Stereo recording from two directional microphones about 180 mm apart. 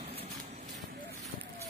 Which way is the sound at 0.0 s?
35° right (ahead or behind).